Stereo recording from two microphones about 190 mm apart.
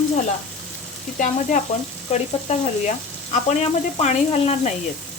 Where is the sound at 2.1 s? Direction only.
35° left (ahead or behind).